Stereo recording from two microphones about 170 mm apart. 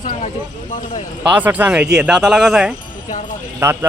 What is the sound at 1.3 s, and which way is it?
Speech, 10° right (ahead or behind).